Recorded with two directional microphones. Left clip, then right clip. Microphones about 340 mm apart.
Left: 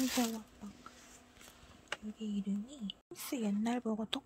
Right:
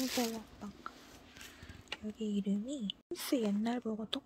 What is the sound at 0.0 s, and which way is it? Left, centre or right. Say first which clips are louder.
Speech: left 1 dB; centre.